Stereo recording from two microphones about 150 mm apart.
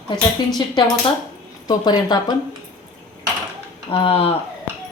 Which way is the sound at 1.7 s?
25° left (ahead or behind).